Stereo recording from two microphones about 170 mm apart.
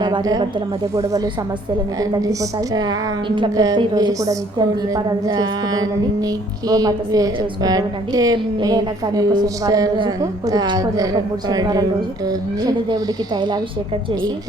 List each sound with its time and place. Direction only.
0.0 s a woman's voice: 25° right (ahead or behind)
2.7 s a woman's voice: 25° right (ahead or behind)
12.9 s a woman's voice: 25° right (ahead or behind)